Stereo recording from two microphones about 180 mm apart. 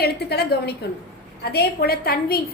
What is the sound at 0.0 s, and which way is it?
A woman's voice, 65° left (ahead or behind).